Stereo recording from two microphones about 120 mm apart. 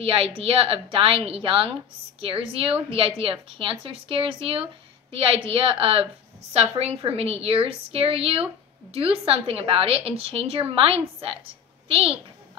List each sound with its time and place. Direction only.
0.0 s a woman's voice: 50° right (ahead or behind)